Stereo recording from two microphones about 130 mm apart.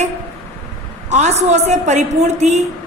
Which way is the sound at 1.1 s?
60° right (ahead or behind).